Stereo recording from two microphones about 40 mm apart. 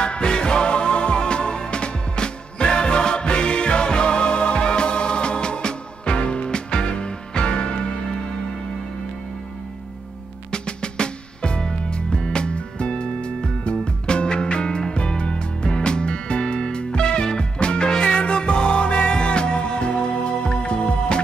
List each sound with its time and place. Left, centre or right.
0.0 s music: left
10.5 s music: left